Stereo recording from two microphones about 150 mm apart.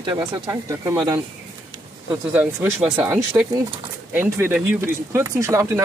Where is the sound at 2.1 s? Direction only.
10° right (ahead or behind).